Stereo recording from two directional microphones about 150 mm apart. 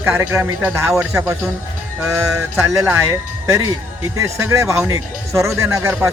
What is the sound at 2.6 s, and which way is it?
A man's voice, 20° right (ahead or behind).